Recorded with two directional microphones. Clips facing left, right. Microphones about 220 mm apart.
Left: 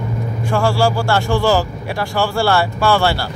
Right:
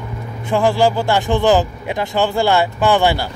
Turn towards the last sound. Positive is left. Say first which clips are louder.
# right 1 dB
turn(degrees=-15)  # may be behind; listen again after turning